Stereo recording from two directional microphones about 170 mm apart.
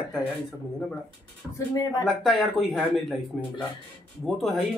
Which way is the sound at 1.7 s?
20° left (ahead or behind).